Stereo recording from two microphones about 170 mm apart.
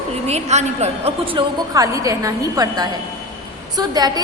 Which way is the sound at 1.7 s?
20° right (ahead or behind).